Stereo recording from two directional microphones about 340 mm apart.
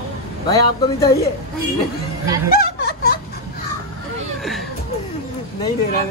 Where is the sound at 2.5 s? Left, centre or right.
Left.